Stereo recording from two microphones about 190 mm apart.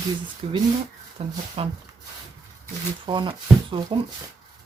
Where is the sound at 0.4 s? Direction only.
30° right (ahead or behind).